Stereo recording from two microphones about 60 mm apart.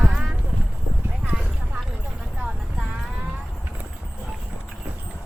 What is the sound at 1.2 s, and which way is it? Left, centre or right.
Clip-clop, right.